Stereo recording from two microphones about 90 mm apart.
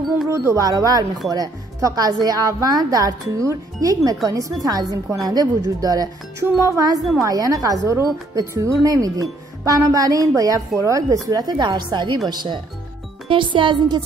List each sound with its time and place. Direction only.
0.3 s a woman's voice: 35° right (ahead or behind); by 12.5 s 55° right (ahead or behind)
13.3 s speech: 65° right (ahead or behind)